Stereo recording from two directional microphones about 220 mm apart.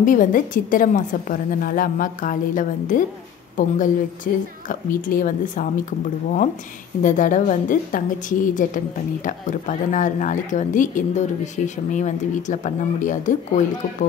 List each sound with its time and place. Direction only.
0.0 s a woman's voice: 40° left (ahead or behind)
7.0 s a woman's voice: 35° left (ahead or behind)